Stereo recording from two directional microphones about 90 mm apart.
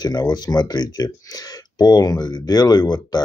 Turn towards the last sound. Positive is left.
turn(degrees=50)  # may be behind; listen again after turning